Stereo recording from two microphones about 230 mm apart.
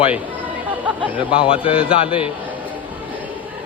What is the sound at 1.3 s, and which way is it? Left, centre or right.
Speech, left.